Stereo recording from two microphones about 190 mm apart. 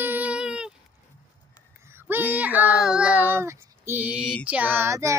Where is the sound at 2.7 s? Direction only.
5° right (ahead or behind).